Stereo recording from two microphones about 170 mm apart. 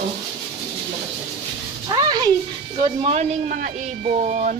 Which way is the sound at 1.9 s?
25° right (ahead or behind).